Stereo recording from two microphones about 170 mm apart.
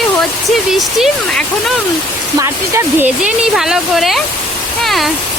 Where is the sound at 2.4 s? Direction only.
15° right (ahead or behind).